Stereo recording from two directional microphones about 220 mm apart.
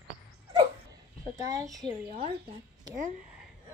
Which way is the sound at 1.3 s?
15° right (ahead or behind).